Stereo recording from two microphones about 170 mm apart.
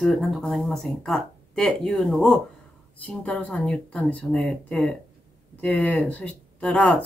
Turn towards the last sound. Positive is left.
turn(degrees=10)  # may be behind; listen again after turning